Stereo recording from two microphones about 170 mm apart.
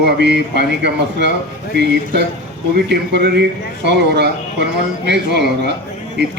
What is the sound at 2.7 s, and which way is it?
Speech, 80° right.